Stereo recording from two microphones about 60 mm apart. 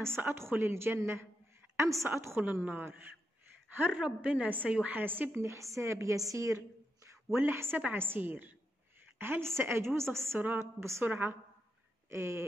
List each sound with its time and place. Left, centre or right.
0.1 s a woman's voice: right
1.8 s a woman's voice: right
2.0 s a woman's voice: right
2.4 s a woman's voice: right
4.0 s a woman's voice: right
5.4 s a woman's voice: right
6.1 s a sound: right
7.3 s a woman's voice: right
9.2 s a woman's voice: right
10.0 s a woman's voice: centre
10.6 s a woman's voice: right
11.1 s a woman's voice: right
12.1 s a woman's voice: right